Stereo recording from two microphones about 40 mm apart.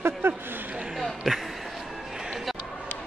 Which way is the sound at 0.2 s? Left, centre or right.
Right.